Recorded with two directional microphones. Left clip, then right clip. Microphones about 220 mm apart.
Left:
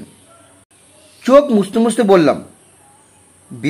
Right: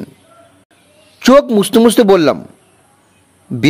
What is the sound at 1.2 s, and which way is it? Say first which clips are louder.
Speech: right 2 dB; 45° right (ahead or behind).